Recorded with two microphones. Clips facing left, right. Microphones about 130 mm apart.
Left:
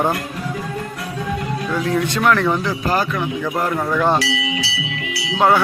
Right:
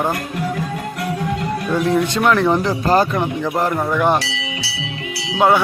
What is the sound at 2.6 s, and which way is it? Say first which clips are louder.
Speech: right 4 dB; 30° right (ahead or behind).